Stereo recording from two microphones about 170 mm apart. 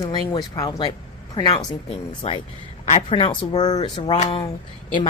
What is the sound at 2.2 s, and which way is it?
Speech, 35° left (ahead or behind).